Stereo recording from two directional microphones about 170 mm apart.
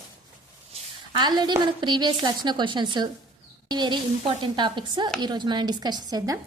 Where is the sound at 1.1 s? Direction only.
25° right (ahead or behind).